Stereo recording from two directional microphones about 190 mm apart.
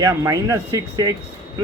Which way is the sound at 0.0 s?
15° right (ahead or behind).